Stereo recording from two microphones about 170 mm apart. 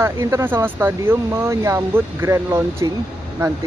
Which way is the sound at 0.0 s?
15° right (ahead or behind).